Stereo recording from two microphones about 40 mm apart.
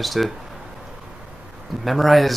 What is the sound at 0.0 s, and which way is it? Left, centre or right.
Speech, centre.